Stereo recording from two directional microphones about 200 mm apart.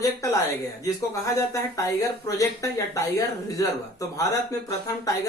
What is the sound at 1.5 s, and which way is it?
Speech, 15° left (ahead or behind).